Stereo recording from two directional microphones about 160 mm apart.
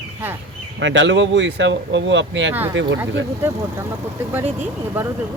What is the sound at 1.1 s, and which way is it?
Speech, 90° right.